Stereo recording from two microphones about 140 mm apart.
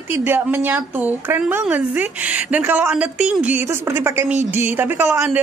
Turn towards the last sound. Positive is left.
turn(degrees=-20)  # may be behind; listen again after turning